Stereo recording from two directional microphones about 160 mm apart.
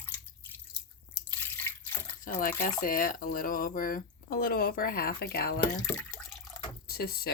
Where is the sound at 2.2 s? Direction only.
65° left (ahead or behind).